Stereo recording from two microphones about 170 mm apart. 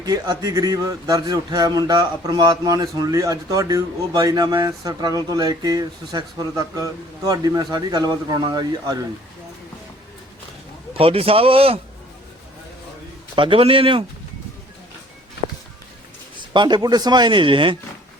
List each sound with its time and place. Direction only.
0.0 s speech: 25° right (ahead or behind)
10.9 s a man's voice: 35° right (ahead or behind)
13.3 s a man's voice: 30° right (ahead or behind)
16.5 s speech: 25° right (ahead or behind)